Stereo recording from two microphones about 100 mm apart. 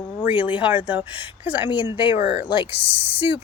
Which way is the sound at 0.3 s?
15° right (ahead or behind).